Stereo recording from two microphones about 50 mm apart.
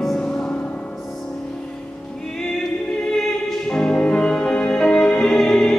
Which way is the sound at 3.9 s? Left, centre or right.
Left.